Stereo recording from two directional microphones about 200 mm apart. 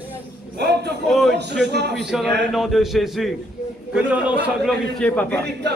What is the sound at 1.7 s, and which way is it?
Speech, 55° right (ahead or behind).